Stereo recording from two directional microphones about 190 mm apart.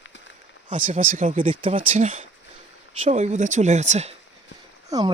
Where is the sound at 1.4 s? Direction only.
30° right (ahead or behind).